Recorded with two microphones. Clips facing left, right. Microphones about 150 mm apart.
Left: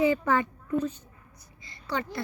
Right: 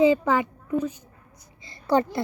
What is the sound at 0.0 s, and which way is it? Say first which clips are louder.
Speech: right 5 dB; 15° right (ahead or behind).